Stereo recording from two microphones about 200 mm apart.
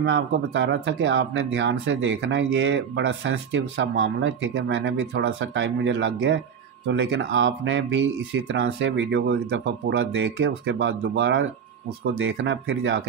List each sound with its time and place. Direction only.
0.0 s speech: 60° right (ahead or behind)